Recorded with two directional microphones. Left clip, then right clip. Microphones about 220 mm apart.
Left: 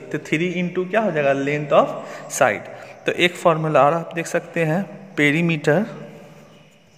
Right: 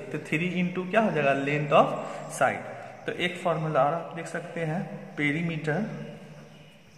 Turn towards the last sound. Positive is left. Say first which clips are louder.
# left 11 dB
turn(degrees=45)  # may be behind; listen again after turning